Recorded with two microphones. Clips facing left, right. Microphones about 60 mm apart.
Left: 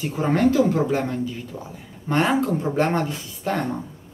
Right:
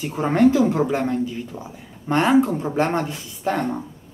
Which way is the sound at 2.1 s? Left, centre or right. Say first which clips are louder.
Right 3 dB; centre.